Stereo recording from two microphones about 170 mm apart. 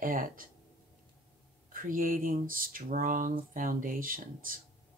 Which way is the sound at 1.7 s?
55° right (ahead or behind).